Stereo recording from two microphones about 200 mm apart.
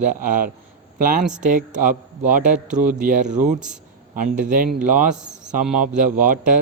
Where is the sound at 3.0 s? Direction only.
40° right (ahead or behind).